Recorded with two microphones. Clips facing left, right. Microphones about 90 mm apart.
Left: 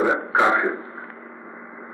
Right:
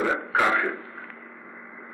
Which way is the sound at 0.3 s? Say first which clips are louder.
Left 4 dB; 20° left (ahead or behind).